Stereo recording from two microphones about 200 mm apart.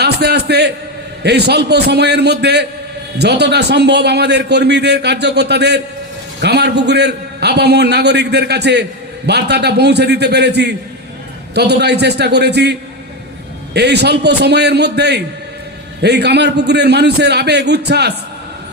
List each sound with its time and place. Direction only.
0.0 s a man's voice: 55° right (ahead or behind)
13.7 s a man's voice: 55° right (ahead or behind)